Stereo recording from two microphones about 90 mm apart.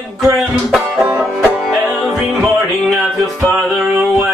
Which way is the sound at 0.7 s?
5° right (ahead or behind).